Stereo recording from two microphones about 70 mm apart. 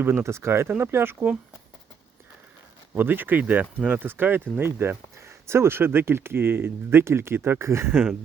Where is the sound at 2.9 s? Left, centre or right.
Right.